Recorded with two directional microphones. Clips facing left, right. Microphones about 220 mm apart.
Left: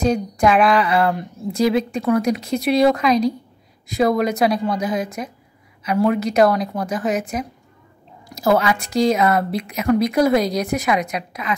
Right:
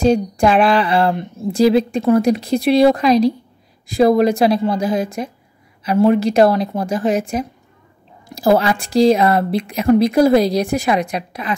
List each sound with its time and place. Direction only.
0.0 s a woman's voice: 30° right (ahead or behind)